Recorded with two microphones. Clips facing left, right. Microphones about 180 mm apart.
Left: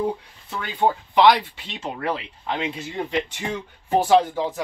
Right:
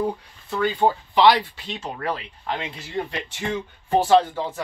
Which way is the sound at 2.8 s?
15° left (ahead or behind).